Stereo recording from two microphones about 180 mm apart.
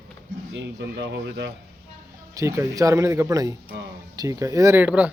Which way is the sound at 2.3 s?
15° right (ahead or behind).